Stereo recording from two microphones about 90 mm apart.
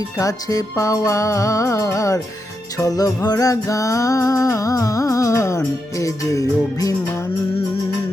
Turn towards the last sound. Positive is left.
turn(degrees=35)  # may be behind; listen again after turning